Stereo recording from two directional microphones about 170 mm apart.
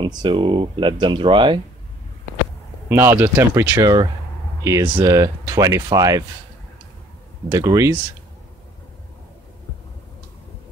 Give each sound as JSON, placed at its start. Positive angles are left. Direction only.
{"t": 0.0, "sound": "speech", "side_deg": -30}
{"t": 2.9, "sound": "speech", "side_deg": -15}
{"t": 7.4, "sound": "speech", "side_deg": -20}